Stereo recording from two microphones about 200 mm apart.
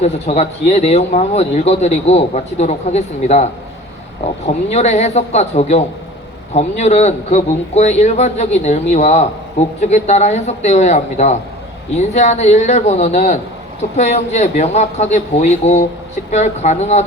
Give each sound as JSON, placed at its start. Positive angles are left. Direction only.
{"t": 0.0, "sound": "a man's voice", "side_deg": 30}